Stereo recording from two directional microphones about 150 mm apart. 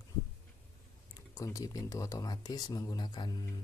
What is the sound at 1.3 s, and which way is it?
Speech, 20° left (ahead or behind).